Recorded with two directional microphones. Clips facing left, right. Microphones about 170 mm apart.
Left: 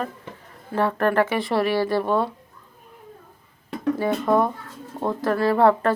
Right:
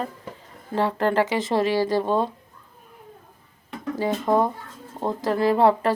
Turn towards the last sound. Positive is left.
turn(degrees=-15)  # may be behind; listen again after turning